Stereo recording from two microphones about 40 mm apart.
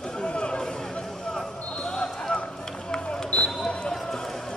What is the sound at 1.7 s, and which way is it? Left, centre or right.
Basketball bounce, centre.